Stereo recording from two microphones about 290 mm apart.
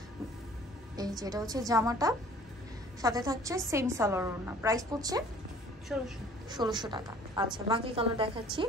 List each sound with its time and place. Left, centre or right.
0.9 s a woman's voice: centre
5.9 s a woman's voice: centre
6.5 s a woman's voice: centre